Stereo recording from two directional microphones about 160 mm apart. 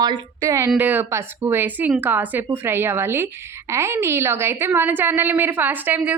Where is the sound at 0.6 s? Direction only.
10° right (ahead or behind).